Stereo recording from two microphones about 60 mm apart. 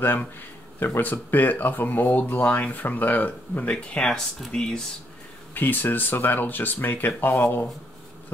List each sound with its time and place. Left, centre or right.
0.7 s speech: left; by 4.8 s centre
5.5 s speech: left